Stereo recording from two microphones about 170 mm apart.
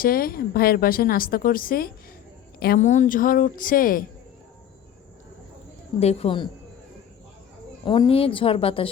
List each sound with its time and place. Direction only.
0.0 s a woman's voice: 60° left (ahead or behind)
2.8 s a woman's voice: 45° left (ahead or behind)
6.0 s a woman's voice: 40° left (ahead or behind)
7.9 s a woman's voice: 30° left (ahead or behind)